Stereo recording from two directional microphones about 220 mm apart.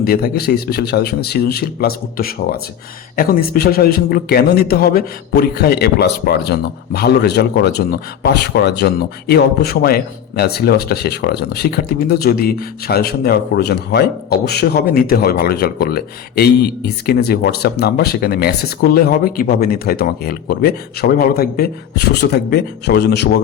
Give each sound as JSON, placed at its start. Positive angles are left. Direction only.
{"t": 0.0, "sound": "a man's voice", "side_deg": 45}